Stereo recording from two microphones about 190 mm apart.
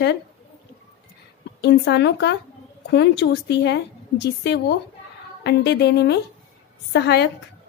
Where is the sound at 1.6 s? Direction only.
60° left (ahead or behind).